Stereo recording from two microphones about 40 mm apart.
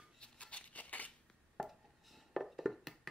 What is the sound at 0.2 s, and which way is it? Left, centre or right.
Scissors, left.